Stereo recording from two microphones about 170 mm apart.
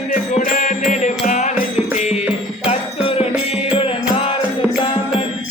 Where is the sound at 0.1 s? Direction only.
50° left (ahead or behind).